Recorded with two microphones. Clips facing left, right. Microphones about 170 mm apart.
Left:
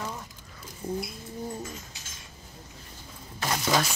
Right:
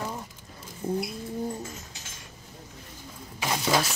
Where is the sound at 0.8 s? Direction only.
30° right (ahead or behind).